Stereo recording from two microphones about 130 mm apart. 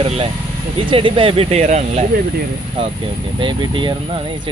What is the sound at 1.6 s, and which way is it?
Speech, 65° right (ahead or behind).